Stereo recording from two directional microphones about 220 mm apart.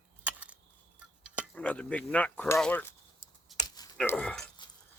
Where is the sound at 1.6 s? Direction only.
5° left (ahead or behind).